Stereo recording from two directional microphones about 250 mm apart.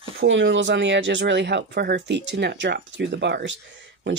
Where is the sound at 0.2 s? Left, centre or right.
Right.